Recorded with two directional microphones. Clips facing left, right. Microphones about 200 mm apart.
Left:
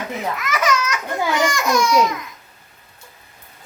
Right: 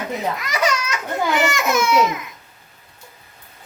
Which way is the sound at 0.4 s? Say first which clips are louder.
Left 1 dB; 30° right (ahead or behind).